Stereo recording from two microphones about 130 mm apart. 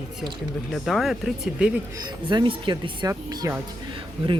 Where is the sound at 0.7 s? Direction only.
Centre (ahead or behind).